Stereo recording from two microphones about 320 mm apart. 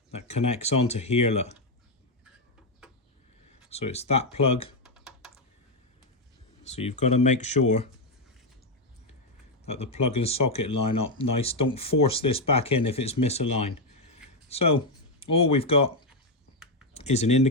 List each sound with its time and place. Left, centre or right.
0.1 s speech: centre
3.5 s speech: centre
4.8 s computer keyboard: centre
6.7 s speech: centre
9.6 s speech: centre